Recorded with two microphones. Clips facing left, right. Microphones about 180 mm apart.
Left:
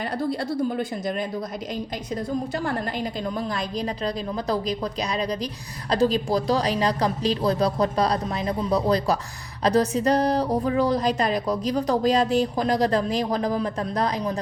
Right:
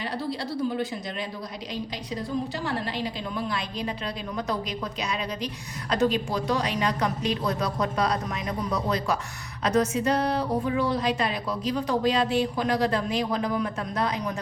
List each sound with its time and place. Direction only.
0.0 s speech: 50° left (ahead or behind)
2.6 s a woman's voice: 45° left (ahead or behind)